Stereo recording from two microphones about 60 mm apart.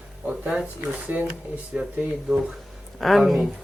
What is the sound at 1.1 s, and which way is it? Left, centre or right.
Speech, right.